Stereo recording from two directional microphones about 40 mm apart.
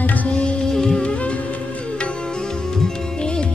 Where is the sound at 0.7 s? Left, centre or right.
Centre.